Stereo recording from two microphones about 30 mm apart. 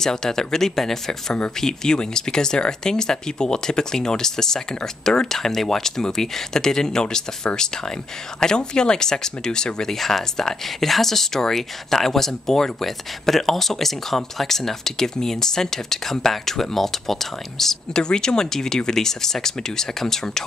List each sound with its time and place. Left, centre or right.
0.0 s speech: centre
9.9 s speech: centre
17.9 s speech: left